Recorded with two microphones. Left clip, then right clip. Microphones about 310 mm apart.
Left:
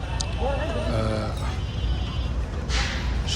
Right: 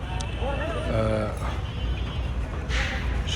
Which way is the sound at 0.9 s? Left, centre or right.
Centre.